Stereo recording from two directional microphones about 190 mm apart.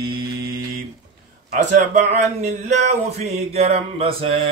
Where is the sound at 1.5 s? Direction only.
40° right (ahead or behind).